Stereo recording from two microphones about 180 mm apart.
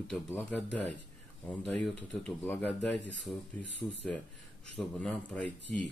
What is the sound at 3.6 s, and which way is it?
Speech, 80° left.